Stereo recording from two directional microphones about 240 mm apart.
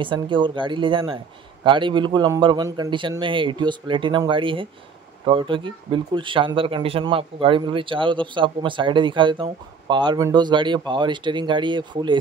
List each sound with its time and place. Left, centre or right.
0.0 s speech: centre